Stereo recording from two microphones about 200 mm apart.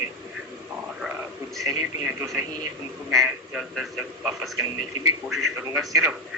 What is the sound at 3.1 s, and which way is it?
A man's voice, centre (ahead or behind).